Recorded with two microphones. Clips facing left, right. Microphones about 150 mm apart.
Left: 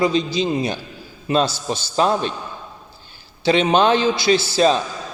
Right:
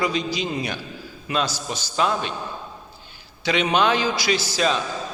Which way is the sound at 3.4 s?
30° left (ahead or behind).